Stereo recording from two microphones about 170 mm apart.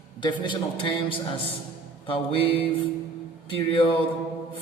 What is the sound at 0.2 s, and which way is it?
A man's voice, 30° left (ahead or behind).